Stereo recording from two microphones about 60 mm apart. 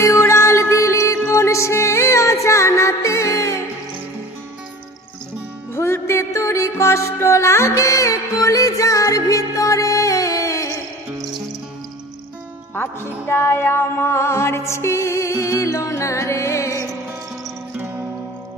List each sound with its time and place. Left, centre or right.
0.0 s music: left
5.7 s music: left
13.2 s music: left